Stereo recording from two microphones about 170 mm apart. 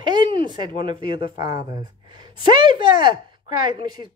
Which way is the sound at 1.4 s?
25° right (ahead or behind).